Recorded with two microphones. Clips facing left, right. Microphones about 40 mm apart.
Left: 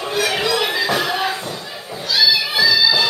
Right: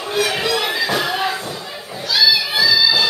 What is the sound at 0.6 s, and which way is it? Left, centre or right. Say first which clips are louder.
Music: left 1 dB; centre.